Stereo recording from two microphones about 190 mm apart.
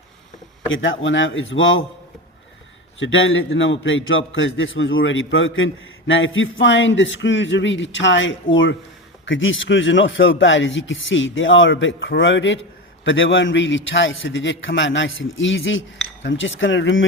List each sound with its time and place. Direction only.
0.7 s speech: 80° left
3.0 s a man's voice: 90° left